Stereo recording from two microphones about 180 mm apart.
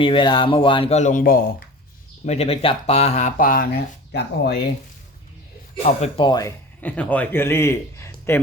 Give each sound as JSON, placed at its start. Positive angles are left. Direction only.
{"t": 0.0, "sound": "speech", "side_deg": 30}
{"t": 2.2, "sound": "speech", "side_deg": 35}
{"t": 5.8, "sound": "speech", "side_deg": 35}
{"t": 6.8, "sound": "a man's voice", "side_deg": 10}